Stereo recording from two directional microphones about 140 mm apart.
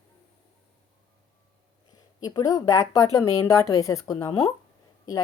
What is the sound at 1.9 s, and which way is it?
A woman's voice, 30° left (ahead or behind).